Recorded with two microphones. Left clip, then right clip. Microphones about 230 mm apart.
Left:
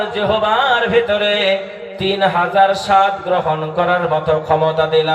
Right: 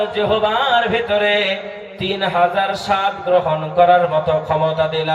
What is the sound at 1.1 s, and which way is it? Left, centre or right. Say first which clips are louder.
Music: left 1 dB; centre.